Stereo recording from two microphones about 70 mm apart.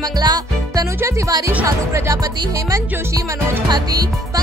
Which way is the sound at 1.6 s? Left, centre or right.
Right.